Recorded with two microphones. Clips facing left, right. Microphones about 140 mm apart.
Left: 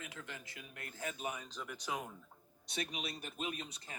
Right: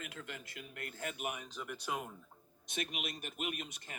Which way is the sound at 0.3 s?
25° left (ahead or behind).